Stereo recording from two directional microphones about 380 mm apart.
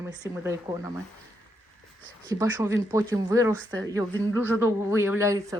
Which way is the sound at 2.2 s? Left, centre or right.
Centre.